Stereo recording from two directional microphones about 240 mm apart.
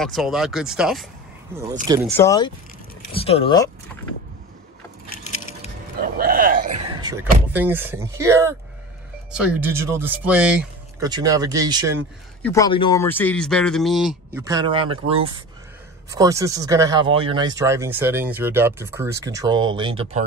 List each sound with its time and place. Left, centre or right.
0.0 s speech: centre
1.5 s speech: centre
2.1 s speech: centre
5.1 s a sound: left
5.9 s a sound: right
7.5 s speech: centre
11.0 s speech: centre
12.4 s speech: centre
12.6 s speech: centre
14.4 s speech: centre